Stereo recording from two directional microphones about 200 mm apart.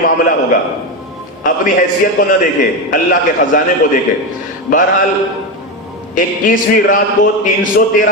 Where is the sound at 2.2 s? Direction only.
45° left (ahead or behind).